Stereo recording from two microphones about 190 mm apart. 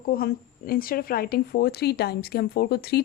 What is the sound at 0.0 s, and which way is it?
A woman's voice, 50° left (ahead or behind).